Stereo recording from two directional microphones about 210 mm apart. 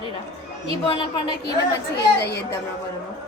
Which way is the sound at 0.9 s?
20° left (ahead or behind).